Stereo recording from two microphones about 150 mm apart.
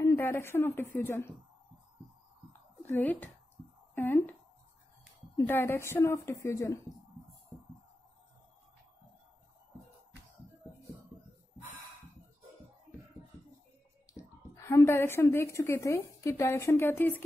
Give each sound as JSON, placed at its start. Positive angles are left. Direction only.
{"t": 0.0, "sound": "a woman's voice", "side_deg": 15}
{"t": 2.9, "sound": "a woman's voice", "side_deg": 10}
{"t": 5.5, "sound": "a woman's voice", "side_deg": 15}
{"t": 14.5, "sound": "a woman's voice", "side_deg": 20}